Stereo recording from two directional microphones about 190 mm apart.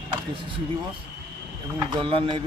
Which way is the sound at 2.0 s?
30° right (ahead or behind).